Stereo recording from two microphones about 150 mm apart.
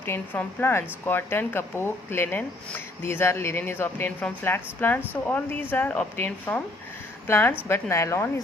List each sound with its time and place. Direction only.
0.0 s a woman's voice: 15° left (ahead or behind)